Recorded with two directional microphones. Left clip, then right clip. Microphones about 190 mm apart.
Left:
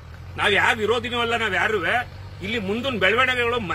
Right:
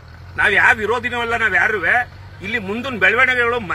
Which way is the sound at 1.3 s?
5° left (ahead or behind).